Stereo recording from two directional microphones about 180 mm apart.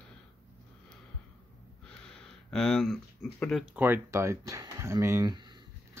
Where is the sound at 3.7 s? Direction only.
10° right (ahead or behind).